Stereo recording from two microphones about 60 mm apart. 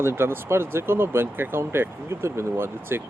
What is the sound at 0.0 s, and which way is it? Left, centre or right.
Speech, right.